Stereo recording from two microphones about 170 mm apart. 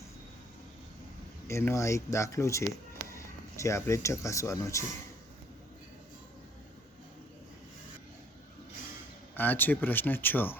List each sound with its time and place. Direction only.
1.5 s speech: 15° left (ahead or behind)
9.3 s speech: 10° left (ahead or behind)